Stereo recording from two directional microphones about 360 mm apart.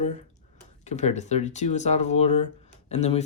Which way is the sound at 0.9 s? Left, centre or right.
Centre.